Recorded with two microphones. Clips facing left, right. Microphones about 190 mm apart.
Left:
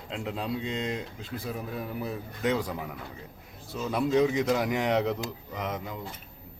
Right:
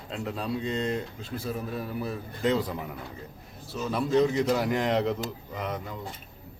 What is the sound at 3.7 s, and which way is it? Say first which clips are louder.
Speech: even; 20° left (ahead or behind).